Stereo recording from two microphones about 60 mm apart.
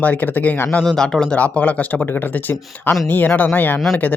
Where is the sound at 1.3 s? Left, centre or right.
Left.